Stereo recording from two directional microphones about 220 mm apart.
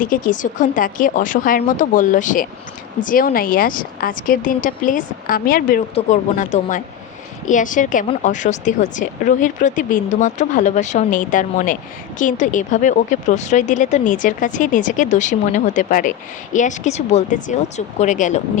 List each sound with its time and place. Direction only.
0.0 s a woman's voice: 35° left (ahead or behind)